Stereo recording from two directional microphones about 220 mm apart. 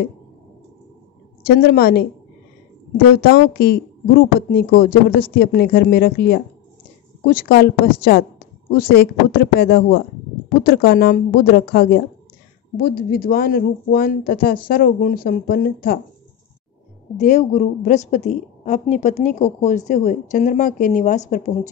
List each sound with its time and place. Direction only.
1.6 s speech: 45° left (ahead or behind)
3.1 s a woman's voice: 45° left (ahead or behind)
17.2 s a woman's voice: 35° left (ahead or behind)